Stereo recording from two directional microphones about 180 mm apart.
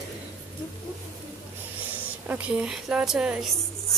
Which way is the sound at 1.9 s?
10° right (ahead or behind).